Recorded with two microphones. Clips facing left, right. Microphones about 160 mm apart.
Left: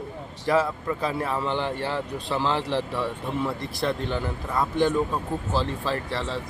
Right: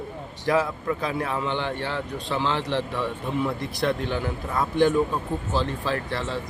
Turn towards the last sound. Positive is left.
turn(degrees=0)  # may be behind; listen again after turning